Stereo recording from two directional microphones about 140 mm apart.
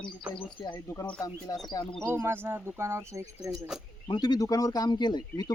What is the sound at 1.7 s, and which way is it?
Speech, 30° left (ahead or behind).